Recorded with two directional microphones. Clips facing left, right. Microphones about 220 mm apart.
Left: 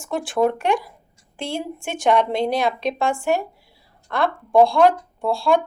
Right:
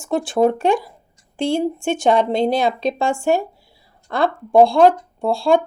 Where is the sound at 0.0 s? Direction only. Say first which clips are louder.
Right 4 dB; 25° right (ahead or behind).